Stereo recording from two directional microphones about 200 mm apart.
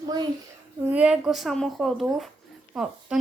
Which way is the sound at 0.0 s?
20° right (ahead or behind).